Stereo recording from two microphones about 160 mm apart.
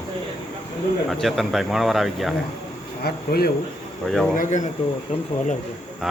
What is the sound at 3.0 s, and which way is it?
Speech, 75° left (ahead or behind).